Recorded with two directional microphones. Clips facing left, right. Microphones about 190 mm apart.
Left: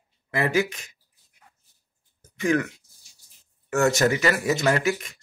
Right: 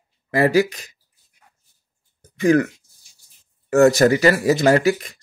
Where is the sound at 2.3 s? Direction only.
35° right (ahead or behind).